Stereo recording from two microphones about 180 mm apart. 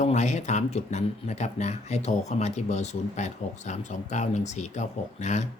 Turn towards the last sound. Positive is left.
turn(degrees=40)  # may be behind; listen again after turning